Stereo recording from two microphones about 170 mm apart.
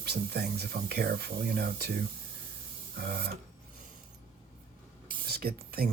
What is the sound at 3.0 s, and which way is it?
Speech, 65° right (ahead or behind).